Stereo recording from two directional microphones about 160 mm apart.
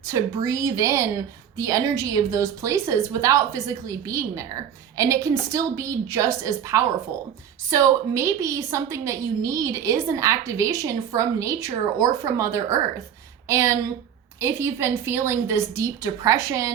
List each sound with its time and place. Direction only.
0.1 s a woman's voice: 20° right (ahead or behind)